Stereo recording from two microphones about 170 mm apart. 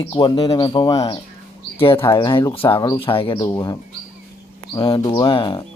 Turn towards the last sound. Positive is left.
turn(degrees=30)  # may be behind; listen again after turning